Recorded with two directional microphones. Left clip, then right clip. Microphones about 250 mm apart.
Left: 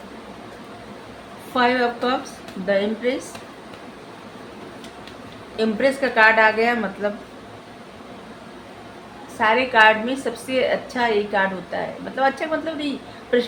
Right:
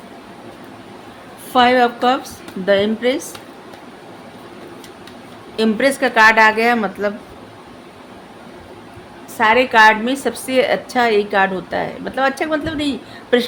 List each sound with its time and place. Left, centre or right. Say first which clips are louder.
1.5 s a woman's voice: right 6 dB; right
5.5 s a woman's voice: right 4 dB; right
9.4 s a woman's voice: right 4 dB; right